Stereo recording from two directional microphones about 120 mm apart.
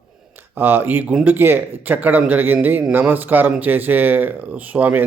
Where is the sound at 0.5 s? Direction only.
15° right (ahead or behind).